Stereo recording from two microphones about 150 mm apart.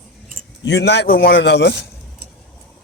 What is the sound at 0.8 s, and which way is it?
Speech, 80° left.